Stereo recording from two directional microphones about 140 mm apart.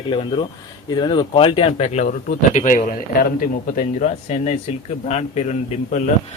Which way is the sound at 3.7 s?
60° left (ahead or behind).